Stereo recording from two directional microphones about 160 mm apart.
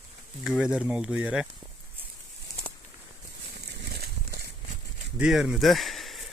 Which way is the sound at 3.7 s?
90° right.